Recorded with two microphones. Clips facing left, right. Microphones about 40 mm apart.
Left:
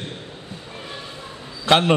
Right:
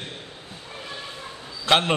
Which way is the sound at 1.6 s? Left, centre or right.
Centre.